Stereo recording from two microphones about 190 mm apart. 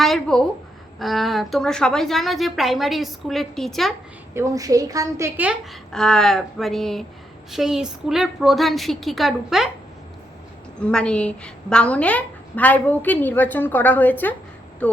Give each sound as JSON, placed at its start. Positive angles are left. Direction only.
{"t": 0.0, "sound": "a woman's voice", "side_deg": 0}
{"t": 4.4, "sound": "a woman's voice", "side_deg": -20}
{"t": 5.9, "sound": "a woman's voice", "side_deg": 5}
{"t": 10.8, "sound": "a woman's voice", "side_deg": 5}